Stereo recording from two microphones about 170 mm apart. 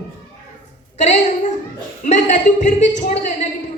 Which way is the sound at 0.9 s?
45° left (ahead or behind).